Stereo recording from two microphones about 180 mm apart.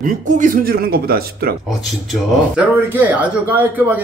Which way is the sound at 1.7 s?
Centre (ahead or behind).